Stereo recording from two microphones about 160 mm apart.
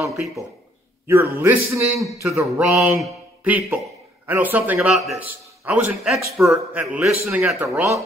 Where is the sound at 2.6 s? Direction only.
Centre (ahead or behind).